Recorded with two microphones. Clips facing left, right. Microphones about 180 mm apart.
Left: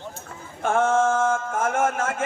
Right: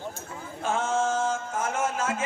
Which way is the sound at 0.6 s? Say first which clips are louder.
Left 6 dB; 55° left (ahead or behind).